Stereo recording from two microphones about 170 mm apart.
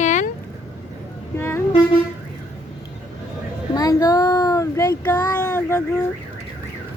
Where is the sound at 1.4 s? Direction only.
15° left (ahead or behind).